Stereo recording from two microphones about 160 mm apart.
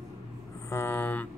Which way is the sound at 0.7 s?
15° left (ahead or behind).